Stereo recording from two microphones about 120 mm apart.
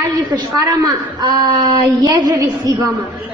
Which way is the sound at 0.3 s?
30° right (ahead or behind).